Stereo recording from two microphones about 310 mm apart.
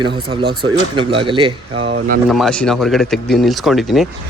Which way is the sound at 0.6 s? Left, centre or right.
Centre.